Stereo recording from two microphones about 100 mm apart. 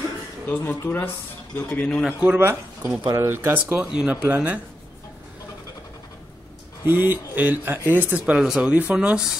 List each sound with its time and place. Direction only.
0.5 s a man's voice: 20° left (ahead or behind)
2.0 s a man's voice: 15° right (ahead or behind)
6.9 s a man's voice: 20° right (ahead or behind)